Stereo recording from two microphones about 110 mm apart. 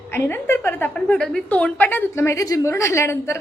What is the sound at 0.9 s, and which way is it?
A woman's voice, 10° left (ahead or behind).